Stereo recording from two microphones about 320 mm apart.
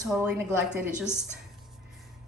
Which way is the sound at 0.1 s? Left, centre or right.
Centre.